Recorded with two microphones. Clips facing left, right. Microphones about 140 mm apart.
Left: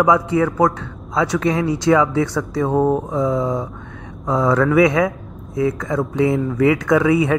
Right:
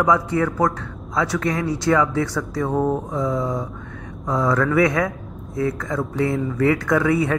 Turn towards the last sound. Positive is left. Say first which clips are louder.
# left 4 dB
turn(degrees=15)  # may be behind; listen again after turning